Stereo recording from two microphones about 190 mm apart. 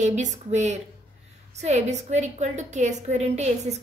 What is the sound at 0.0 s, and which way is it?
A woman's voice, 40° right (ahead or behind).